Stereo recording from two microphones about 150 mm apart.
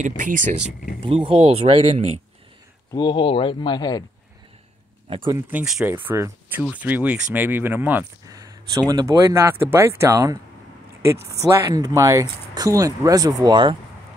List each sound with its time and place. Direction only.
0.2 s speech: 60° right (ahead or behind)
1.0 s speech: 35° right (ahead or behind)
2.9 s speech: 30° left (ahead or behind)
5.5 s speech: 10° right (ahead or behind)
8.3 s speech: 25° right (ahead or behind)